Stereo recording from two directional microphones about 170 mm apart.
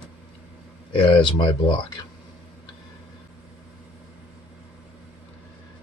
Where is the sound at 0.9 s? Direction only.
30° left (ahead or behind).